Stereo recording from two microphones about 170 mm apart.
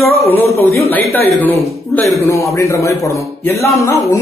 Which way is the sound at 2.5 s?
15° left (ahead or behind).